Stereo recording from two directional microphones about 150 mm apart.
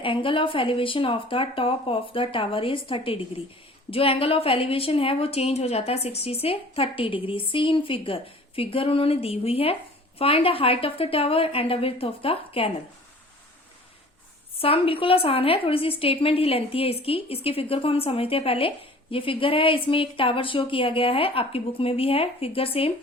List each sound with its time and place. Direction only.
0.0 s a woman's voice: 35° left (ahead or behind)
14.6 s a woman's voice: 40° left (ahead or behind)